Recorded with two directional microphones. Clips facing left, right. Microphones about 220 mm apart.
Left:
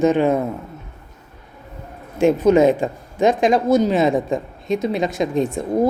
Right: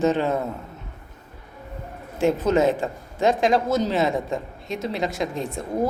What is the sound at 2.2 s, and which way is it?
A woman's voice, 15° left (ahead or behind).